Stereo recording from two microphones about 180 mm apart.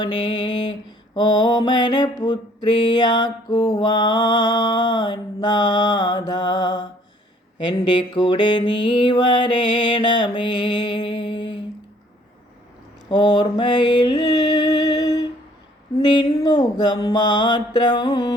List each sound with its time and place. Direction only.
0.0 s mantra: 25° left (ahead or behind)
13.1 s music: 25° left (ahead or behind)
16.0 s mantra: 25° left (ahead or behind)